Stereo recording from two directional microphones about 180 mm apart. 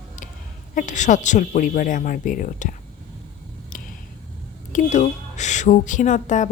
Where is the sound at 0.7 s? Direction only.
45° left (ahead or behind).